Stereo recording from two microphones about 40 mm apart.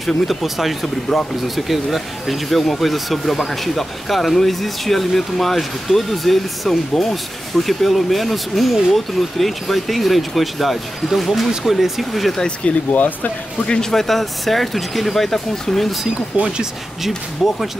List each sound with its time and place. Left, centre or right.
0.0 s speech: centre
12.4 s speech: left
12.9 s speech: left
13.7 s speech: centre
16.3 s speech: right
17.4 s speech: centre